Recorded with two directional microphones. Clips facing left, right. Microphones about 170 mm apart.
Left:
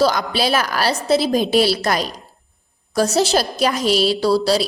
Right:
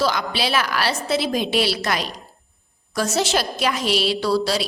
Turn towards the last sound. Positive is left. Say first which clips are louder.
# left 4 dB
turn(degrees=35)  # may be behind; listen again after turning